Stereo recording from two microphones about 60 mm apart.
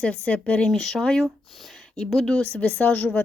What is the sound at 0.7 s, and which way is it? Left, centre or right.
A woman's voice, centre.